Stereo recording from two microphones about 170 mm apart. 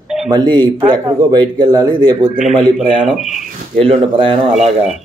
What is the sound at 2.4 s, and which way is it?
Speech, 5° right (ahead or behind).